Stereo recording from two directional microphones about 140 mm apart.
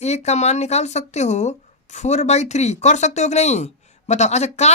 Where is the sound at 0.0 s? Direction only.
50° left (ahead or behind).